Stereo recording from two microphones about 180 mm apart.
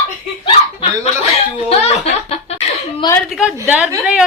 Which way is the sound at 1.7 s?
35° left (ahead or behind).